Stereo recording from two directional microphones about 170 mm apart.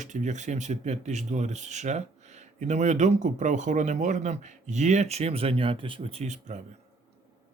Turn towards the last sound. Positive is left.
turn(degrees=-45)  # may be behind; listen again after turning